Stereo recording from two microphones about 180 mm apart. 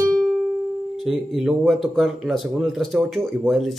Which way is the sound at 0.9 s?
Centre (ahead or behind).